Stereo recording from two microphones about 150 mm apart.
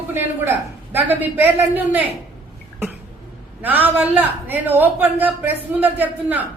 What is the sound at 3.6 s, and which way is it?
A woman's voice, 10° right (ahead or behind).